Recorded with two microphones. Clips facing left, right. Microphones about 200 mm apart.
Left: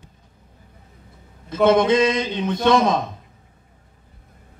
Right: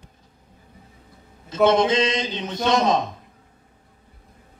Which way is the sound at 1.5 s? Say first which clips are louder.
Left 2 dB; 55° left (ahead or behind).